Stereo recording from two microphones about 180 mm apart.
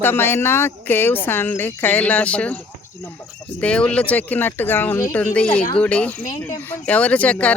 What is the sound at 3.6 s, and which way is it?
Speech, 5° left (ahead or behind).